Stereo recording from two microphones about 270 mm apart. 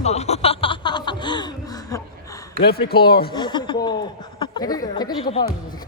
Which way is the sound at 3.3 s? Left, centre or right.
Centre.